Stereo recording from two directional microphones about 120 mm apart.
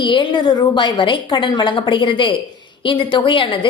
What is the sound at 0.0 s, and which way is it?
A woman's voice, 40° left (ahead or behind).